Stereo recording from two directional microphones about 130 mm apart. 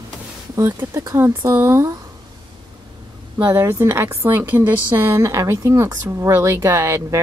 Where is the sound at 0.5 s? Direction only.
20° right (ahead or behind).